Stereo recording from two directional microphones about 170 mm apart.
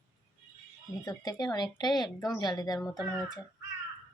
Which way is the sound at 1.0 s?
20° left (ahead or behind).